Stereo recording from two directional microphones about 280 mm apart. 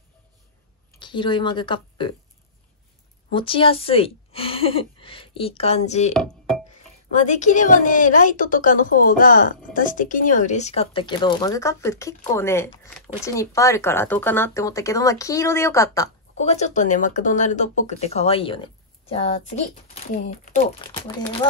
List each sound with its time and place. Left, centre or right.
0.9 s a woman's voice: centre
3.3 s speech: centre
6.1 s speech: centre
7.2 s a woman's voice: left
16.3 s speech: left